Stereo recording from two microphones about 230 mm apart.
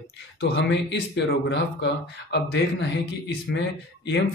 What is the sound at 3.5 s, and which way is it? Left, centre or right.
Speech, left.